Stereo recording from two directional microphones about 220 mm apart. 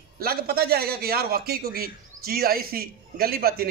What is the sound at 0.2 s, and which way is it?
A man's voice, 45° right (ahead or behind).